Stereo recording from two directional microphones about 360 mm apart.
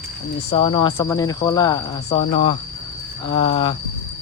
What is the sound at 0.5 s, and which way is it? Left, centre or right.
Speech, centre.